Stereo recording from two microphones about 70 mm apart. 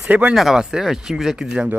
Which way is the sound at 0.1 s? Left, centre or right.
Right.